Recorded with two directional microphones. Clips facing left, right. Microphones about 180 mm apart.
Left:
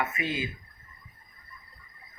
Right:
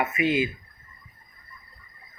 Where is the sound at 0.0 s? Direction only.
15° right (ahead or behind).